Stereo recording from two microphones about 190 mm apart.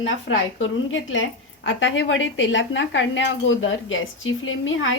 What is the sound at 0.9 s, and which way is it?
A woman's voice, 90° left.